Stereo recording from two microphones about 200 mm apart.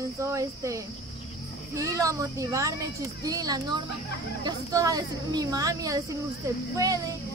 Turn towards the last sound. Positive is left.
turn(degrees=-15)  # may be behind; listen again after turning